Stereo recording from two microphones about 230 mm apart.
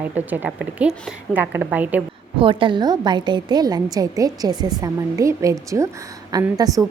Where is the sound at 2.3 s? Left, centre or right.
Right.